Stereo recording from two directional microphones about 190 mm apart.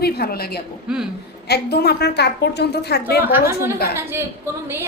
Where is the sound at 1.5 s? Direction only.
55° left (ahead or behind).